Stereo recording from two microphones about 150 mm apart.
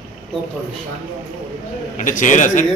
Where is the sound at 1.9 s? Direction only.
60° left (ahead or behind).